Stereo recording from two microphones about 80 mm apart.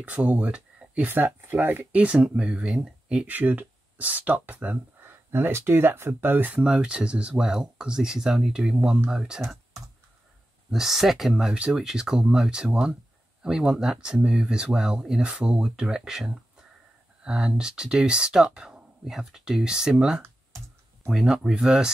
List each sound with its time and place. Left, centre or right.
0.0 s speech: centre
1.9 s speech: centre
3.3 s speech: right
5.3 s speech: right
6.6 s speech: centre
9.4 s speech: right
10.7 s speech: centre
20.2 s computer keyboard: right
21.1 s speech: centre